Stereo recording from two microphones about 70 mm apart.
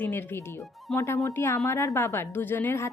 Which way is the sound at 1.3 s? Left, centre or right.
Left.